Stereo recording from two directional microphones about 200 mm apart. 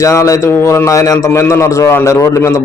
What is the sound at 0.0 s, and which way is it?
A man's voice, 15° left (ahead or behind).